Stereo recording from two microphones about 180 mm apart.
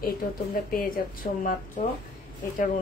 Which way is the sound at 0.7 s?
55° left (ahead or behind).